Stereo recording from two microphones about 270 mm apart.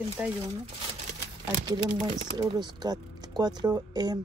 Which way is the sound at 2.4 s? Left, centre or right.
Centre.